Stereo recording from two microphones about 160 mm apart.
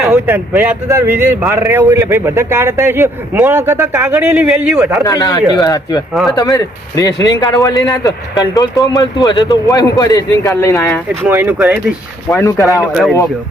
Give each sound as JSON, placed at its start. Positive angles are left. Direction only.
{"t": 0.0, "sound": "speech", "side_deg": -5}
{"t": 5.0, "sound": "a man's voice", "side_deg": 20}
{"t": 11.3, "sound": "speech", "side_deg": -10}
{"t": 12.3, "sound": "a man's voice", "side_deg": 20}
{"t": 12.9, "sound": "speech", "side_deg": 0}